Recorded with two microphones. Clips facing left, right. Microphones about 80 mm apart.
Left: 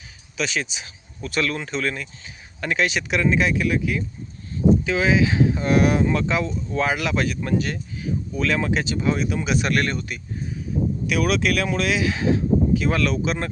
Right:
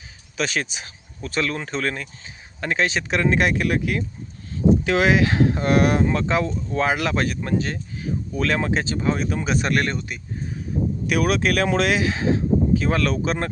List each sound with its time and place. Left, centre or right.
0.3 s speech: right
3.2 s speech: right
6.0 s speech: right
11.0 s speech: right
11.7 s speech: right
11.9 s speech: right